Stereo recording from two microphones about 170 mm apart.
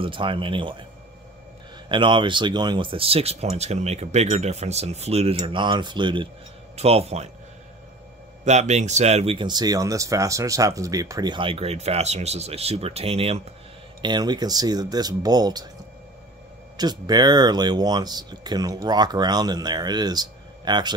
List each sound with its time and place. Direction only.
0.0 s speech: 30° right (ahead or behind)
1.9 s speech: 30° right (ahead or behind)
5.6 s speech: 25° right (ahead or behind)
8.5 s speech: 40° right (ahead or behind)
14.0 s speech: 25° right (ahead or behind)
16.7 s speech: 25° right (ahead or behind)